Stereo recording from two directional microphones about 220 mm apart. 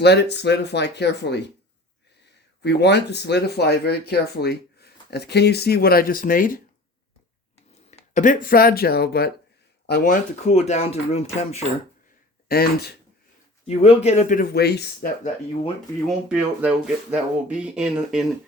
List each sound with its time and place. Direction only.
0.0 s speech: 50° left (ahead or behind)
2.6 s speech: 50° left (ahead or behind)
7.9 s speech: 30° left (ahead or behind)
12.5 s speech: 45° left (ahead or behind)
13.7 s speech: 30° left (ahead or behind); by 15.1 s 50° left (ahead or behind)
16.0 s speech: 5° right (ahead or behind)